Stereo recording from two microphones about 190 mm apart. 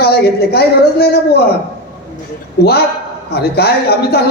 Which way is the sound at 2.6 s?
55° left (ahead or behind).